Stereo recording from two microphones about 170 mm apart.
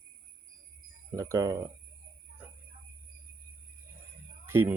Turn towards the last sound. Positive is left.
turn(degrees=-15)  # may be behind; listen again after turning